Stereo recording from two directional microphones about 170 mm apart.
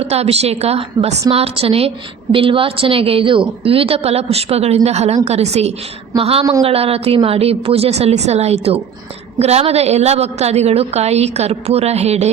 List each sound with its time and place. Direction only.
0.0 s a woman's voice: 35° right (ahead or behind)